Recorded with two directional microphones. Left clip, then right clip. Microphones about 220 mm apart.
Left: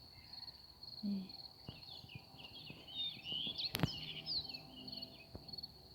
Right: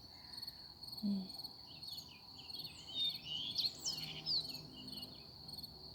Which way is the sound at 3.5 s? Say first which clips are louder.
Right 2 dB; 45° right (ahead or behind).